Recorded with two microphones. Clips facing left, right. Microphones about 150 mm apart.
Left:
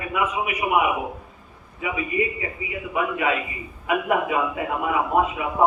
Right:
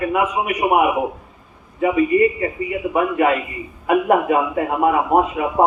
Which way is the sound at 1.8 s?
45° right (ahead or behind).